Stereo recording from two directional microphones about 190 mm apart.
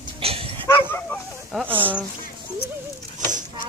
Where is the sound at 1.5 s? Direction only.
Centre (ahead or behind).